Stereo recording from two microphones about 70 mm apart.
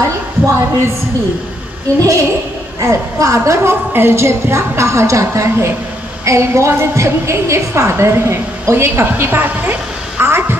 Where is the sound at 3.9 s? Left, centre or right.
Right.